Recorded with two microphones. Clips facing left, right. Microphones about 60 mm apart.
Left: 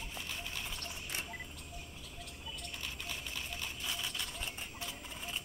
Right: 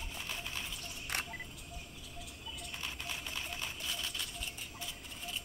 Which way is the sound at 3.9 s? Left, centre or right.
Centre.